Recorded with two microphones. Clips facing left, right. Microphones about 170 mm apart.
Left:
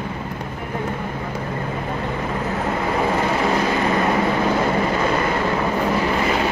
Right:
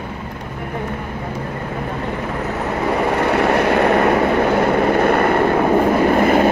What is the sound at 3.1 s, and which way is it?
Vehicle, 70° right (ahead or behind).